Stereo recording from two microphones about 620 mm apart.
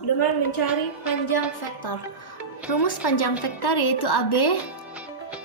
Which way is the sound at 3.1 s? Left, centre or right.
Left.